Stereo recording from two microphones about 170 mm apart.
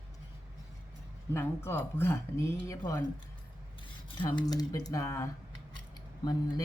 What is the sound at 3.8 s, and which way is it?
Cutlery, 30° left (ahead or behind).